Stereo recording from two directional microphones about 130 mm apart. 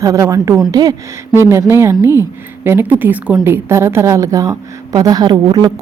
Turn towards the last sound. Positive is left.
turn(degrees=-35)  # may be behind; listen again after turning